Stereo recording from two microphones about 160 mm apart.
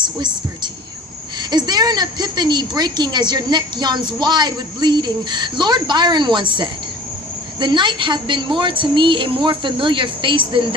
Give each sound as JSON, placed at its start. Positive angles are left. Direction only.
{"t": 0.0, "sound": "a woman's voice", "side_deg": -30}